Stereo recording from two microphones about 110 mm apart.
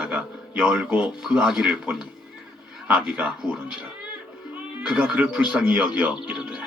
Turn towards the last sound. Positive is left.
turn(degrees=-10)  # may be behind; listen again after turning